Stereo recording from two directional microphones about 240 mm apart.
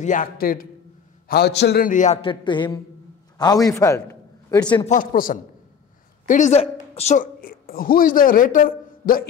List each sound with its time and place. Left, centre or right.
0.0 s a man's voice: left
2.2 s a man's voice: centre
4.8 s a man's voice: left